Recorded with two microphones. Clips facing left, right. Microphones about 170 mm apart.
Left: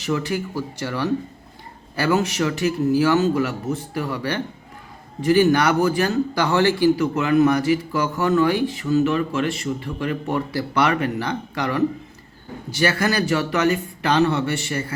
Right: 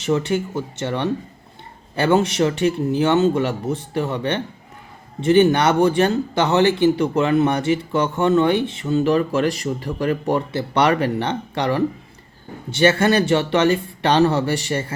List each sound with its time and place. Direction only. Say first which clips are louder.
0.0 s speech: right 4 dB; 30° right (ahead or behind)